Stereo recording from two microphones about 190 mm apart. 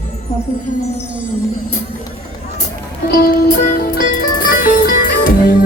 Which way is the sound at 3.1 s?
50° left (ahead or behind).